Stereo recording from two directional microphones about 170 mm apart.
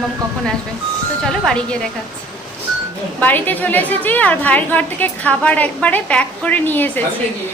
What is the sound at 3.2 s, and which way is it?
A woman's voice, 10° left (ahead or behind).